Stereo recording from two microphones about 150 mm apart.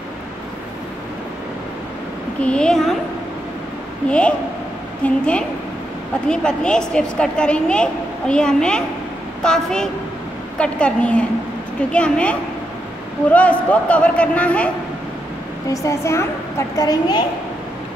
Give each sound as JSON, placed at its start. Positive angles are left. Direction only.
{"t": 2.4, "sound": "a woman's voice", "side_deg": 5}
{"t": 5.0, "sound": "a man's voice", "side_deg": 5}
{"t": 15.7, "sound": "a woman's voice", "side_deg": 20}